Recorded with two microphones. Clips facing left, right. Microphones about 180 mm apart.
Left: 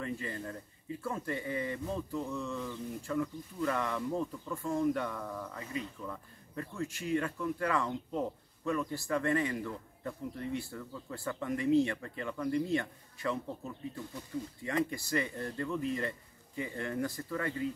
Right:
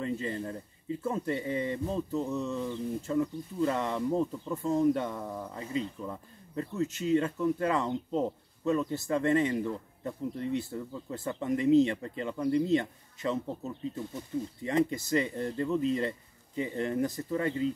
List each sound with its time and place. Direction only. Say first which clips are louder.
0.0 s speech: right 5 dB; 25° right (ahead or behind)